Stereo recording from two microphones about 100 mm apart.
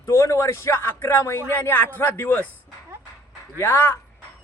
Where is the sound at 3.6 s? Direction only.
25° left (ahead or behind).